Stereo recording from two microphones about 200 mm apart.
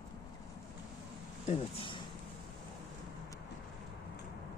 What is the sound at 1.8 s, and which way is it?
Speech, 25° left (ahead or behind).